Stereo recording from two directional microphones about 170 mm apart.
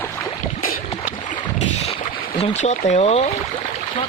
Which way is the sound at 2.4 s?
40° left (ahead or behind).